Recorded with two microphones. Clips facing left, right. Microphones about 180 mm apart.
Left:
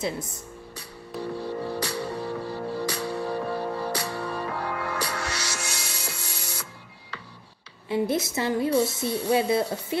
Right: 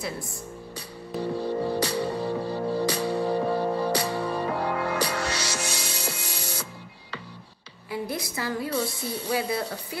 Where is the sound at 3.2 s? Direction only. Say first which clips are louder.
Right 5 dB; 25° right (ahead or behind).